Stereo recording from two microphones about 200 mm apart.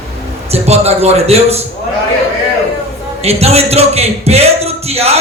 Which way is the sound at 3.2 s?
30° right (ahead or behind).